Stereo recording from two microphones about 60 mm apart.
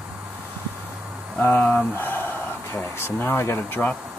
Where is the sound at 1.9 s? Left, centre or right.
Left.